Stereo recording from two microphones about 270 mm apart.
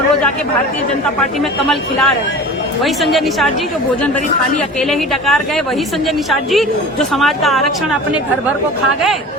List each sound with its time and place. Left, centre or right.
1.6 s a woman's voice: centre
4.9 s a woman's voice: centre